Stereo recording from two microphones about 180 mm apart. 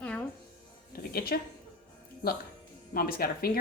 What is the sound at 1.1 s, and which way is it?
Speech, 55° left (ahead or behind).